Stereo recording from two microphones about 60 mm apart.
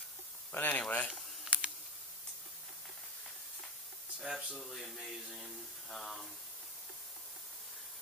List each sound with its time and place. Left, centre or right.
0.5 s speech: left
1.5 s computer keyboard: centre
4.2 s a sound: centre